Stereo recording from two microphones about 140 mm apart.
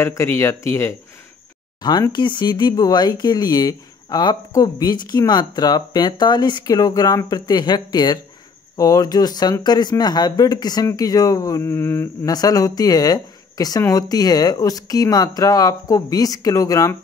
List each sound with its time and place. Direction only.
0.0 s speech: 20° left (ahead or behind)
1.8 s speech: 30° left (ahead or behind)